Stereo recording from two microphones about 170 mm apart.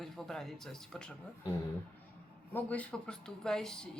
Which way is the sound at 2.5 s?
10° left (ahead or behind).